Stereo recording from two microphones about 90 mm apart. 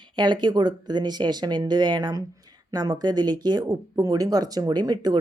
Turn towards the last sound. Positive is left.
turn(degrees=-50)  # may be behind; listen again after turning